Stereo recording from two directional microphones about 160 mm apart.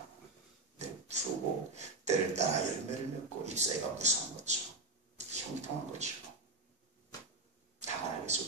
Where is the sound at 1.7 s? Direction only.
45° right (ahead or behind).